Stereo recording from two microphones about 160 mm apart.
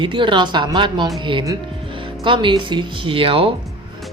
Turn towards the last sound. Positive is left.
turn(degrees=-35)  # may be behind; listen again after turning